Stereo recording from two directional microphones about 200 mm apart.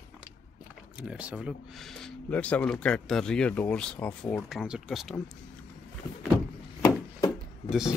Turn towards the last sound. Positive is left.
turn(degrees=0)  # may be behind; listen again after turning